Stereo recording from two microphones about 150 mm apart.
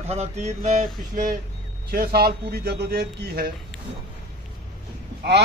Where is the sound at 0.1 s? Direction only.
45° right (ahead or behind); by 1.4 s 65° right (ahead or behind).